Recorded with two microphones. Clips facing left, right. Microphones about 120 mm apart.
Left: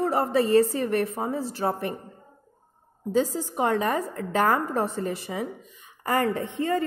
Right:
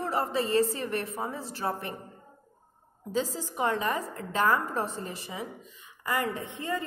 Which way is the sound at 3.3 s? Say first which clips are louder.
Left 5 dB; 45° left (ahead or behind).